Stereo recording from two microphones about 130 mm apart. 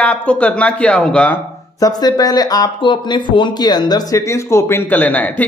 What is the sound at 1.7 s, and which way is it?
Speech, 30° left (ahead or behind).